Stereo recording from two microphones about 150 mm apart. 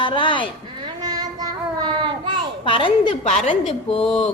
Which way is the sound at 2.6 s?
35° left (ahead or behind).